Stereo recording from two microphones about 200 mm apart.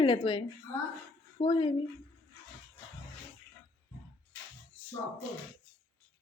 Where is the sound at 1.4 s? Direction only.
25° left (ahead or behind).